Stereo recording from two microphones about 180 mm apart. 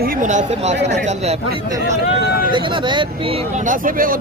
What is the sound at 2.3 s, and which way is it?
Speech, 55° left (ahead or behind).